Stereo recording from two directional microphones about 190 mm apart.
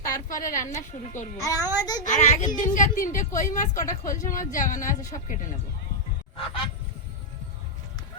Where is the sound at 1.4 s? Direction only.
15° left (ahead or behind).